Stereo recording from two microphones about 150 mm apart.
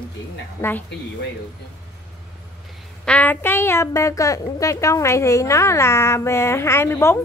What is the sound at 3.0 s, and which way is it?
A woman's voice, 10° left (ahead or behind).